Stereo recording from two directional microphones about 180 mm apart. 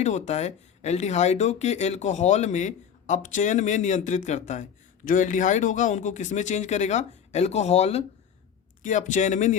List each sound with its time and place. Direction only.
0.0 s speech: 40° left (ahead or behind)